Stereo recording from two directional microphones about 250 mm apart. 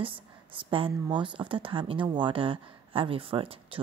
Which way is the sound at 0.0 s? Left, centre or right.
Centre.